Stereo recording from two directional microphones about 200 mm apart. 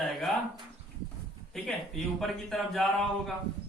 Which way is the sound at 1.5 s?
Centre (ahead or behind).